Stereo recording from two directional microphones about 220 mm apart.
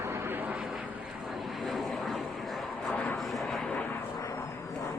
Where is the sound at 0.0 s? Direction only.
10° right (ahead or behind).